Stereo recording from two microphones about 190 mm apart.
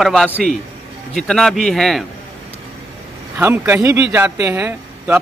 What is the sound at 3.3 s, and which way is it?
Speech, 10° right (ahead or behind).